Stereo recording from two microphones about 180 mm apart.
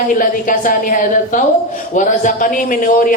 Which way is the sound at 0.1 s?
50° left (ahead or behind).